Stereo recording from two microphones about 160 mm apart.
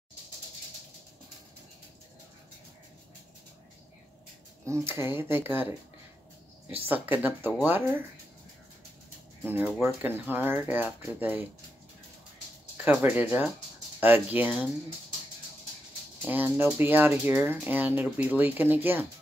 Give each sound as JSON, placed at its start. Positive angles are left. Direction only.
{"t": 4.6, "sound": "speech", "side_deg": -15}
{"t": 6.7, "sound": "speech", "side_deg": -10}
{"t": 9.4, "sound": "speech", "side_deg": -10}
{"t": 12.8, "sound": "speech", "side_deg": -10}
{"t": 16.3, "sound": "speech", "side_deg": -10}